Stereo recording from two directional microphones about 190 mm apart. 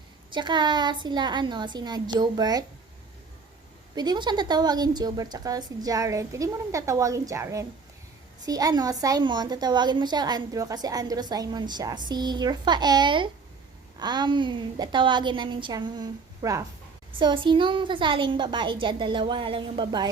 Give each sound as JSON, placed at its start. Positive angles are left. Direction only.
{"t": 0.3, "sound": "a woman's voice", "side_deg": -25}
{"t": 3.9, "sound": "a woman's voice", "side_deg": -20}